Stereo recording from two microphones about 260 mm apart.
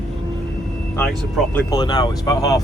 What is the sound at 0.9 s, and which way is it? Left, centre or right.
Speech, centre.